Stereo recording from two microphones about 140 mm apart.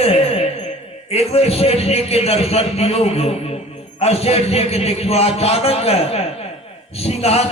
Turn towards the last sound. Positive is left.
turn(degrees=45)  # may be behind; listen again after turning